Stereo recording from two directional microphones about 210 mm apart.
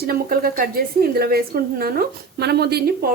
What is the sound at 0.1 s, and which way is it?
A woman's voice, 45° right (ahead or behind).